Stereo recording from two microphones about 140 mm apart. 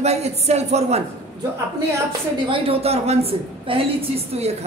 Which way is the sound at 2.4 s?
40° right (ahead or behind).